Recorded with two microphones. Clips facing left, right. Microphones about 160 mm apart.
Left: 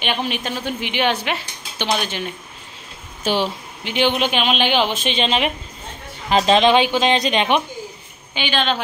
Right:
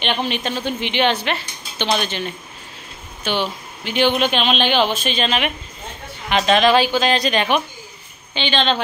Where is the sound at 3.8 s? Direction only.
15° left (ahead or behind).